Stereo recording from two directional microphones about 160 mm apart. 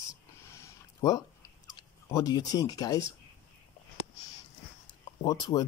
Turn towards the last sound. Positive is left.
turn(degrees=25)  # may be behind; listen again after turning